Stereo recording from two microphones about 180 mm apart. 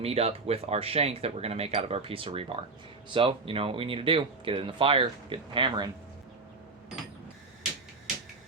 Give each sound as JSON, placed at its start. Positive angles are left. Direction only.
{"t": 0.0, "sound": "speech", "side_deg": -35}